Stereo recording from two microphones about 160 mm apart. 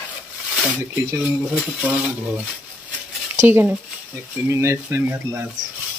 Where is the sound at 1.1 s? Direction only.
10° right (ahead or behind).